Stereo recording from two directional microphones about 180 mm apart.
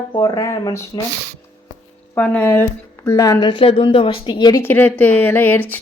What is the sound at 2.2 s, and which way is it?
Speech, 5° left (ahead or behind).